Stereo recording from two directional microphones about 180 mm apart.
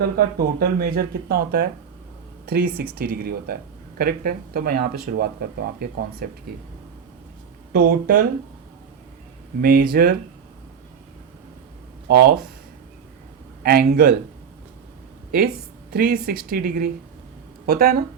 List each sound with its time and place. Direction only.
0.2 s speech: 60° right (ahead or behind)
7.7 s speech: 55° right (ahead or behind)
9.6 s speech: 55° right (ahead or behind)
12.0 s speech: 60° right (ahead or behind)
13.6 s speech: 55° right (ahead or behind)
15.3 s speech: 60° right (ahead or behind)